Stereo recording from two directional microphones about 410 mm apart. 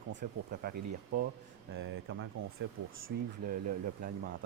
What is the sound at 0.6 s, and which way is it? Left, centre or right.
Speech, right.